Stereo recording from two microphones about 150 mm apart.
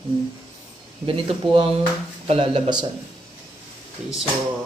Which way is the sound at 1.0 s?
35° right (ahead or behind).